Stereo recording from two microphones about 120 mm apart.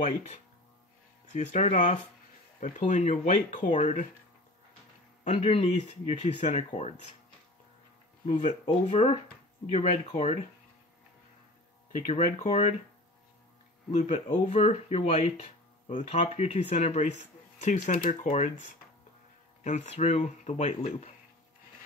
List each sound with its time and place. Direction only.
1.3 s speech: 85° left
5.2 s speech: 60° left (ahead or behind)
8.3 s speech: 75° left (ahead or behind)
11.9 s speech: 80° left
13.9 s speech: 75° left (ahead or behind)
16.2 s speech: 55° left (ahead or behind)
17.6 s speech: 90° left
19.6 s speech: 75° left (ahead or behind)